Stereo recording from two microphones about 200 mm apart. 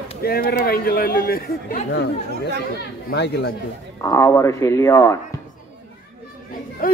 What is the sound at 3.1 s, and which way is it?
Speech, 60° left (ahead or behind).